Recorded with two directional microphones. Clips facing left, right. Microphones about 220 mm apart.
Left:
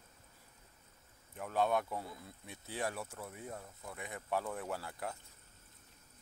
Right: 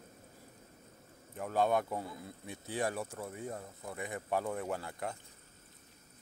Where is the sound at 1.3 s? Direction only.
Centre (ahead or behind).